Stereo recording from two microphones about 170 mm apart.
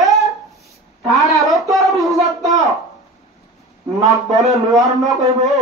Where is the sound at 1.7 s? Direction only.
Centre (ahead or behind).